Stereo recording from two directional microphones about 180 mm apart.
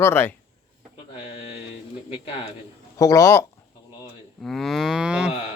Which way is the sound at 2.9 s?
20° left (ahead or behind).